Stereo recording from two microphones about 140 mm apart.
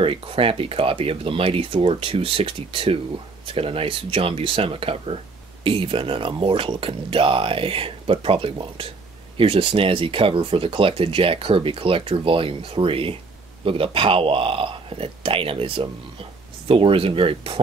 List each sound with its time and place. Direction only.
0.0 s speech: 40° right (ahead or behind)